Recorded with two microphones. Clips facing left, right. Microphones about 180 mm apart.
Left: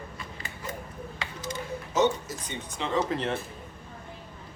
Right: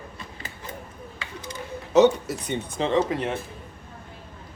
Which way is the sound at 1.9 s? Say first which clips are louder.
Right 8 dB; 65° right (ahead or behind).